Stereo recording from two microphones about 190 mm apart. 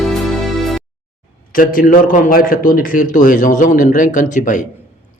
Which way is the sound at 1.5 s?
50° left (ahead or behind).